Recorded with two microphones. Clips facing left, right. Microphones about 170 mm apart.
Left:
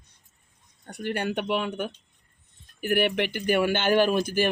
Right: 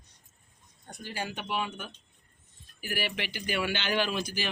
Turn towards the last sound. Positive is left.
turn(degrees=50)  # may be behind; listen again after turning